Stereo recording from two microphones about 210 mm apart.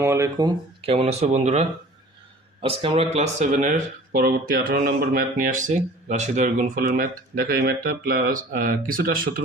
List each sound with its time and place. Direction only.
0.0 s speech: 15° right (ahead or behind); by 9.4 s 40° right (ahead or behind)